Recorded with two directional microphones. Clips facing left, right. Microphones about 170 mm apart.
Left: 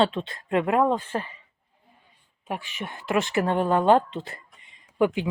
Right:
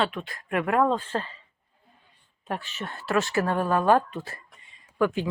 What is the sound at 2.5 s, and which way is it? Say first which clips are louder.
Speech: even; 15° left (ahead or behind).